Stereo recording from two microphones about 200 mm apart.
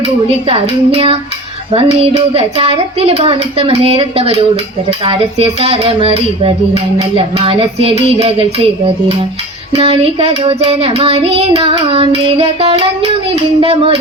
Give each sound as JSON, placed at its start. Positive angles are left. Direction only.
{"t": 0.4, "sound": "child singing", "side_deg": -30}
{"t": 8.2, "sound": "speech", "side_deg": -30}
{"t": 9.7, "sound": "child singing", "side_deg": -30}